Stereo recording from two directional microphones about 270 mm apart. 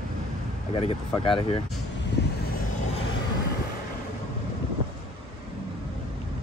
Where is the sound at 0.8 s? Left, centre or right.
Centre.